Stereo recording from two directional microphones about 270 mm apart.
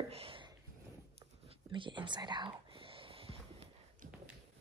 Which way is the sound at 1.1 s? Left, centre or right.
Centre.